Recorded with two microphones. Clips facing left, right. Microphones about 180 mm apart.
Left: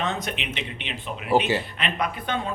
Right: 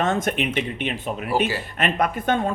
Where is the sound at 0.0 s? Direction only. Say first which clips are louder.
Right 7 dB; 50° right (ahead or behind).